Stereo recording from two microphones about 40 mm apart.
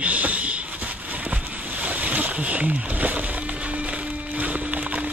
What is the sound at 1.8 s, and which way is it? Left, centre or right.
Speech, right.